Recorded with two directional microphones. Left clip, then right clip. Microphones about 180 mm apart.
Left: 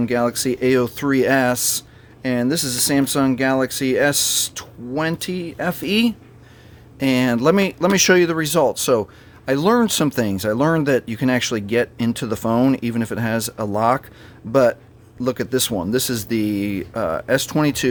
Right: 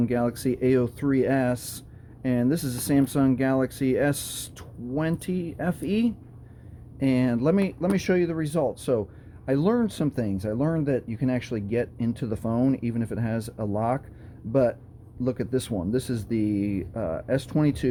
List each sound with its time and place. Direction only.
0.0 s speech: 15° left (ahead or behind)
9.7 s speech: 30° left (ahead or behind)